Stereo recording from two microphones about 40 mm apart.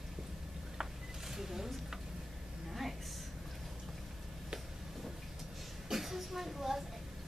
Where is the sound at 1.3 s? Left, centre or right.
Centre.